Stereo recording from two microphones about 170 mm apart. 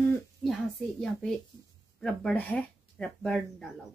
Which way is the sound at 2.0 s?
5° left (ahead or behind).